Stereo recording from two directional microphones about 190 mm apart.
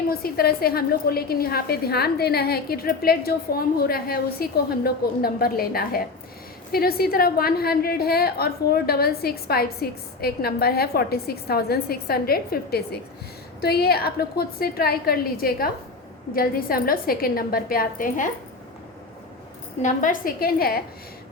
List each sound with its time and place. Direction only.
0.1 s a woman's voice: 55° left (ahead or behind)
19.8 s a woman's voice: 45° left (ahead or behind)